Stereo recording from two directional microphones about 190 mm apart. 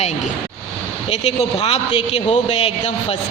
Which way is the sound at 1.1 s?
35° left (ahead or behind).